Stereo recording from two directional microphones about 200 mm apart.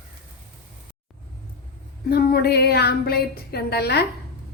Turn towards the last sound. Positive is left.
turn(degrees=55)  # may be behind; listen again after turning